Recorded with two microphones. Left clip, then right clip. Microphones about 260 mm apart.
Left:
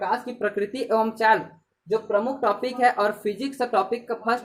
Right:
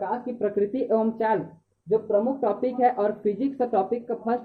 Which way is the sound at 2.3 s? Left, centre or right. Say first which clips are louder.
Left 1 dB; centre.